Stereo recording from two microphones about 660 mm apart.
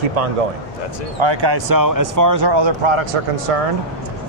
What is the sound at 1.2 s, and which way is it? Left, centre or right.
Speech, right.